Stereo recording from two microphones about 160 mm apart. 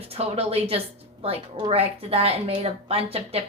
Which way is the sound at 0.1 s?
40° right (ahead or behind).